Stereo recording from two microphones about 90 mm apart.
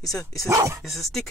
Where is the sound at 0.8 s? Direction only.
Centre (ahead or behind).